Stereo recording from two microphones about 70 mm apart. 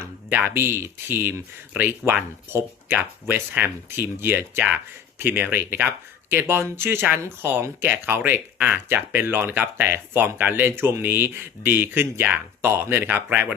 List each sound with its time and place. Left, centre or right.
0.0 s speech: right